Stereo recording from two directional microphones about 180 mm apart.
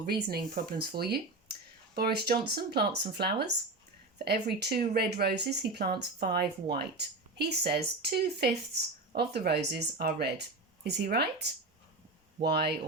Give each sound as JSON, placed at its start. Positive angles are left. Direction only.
{"t": 0.0, "sound": "speech", "side_deg": -60}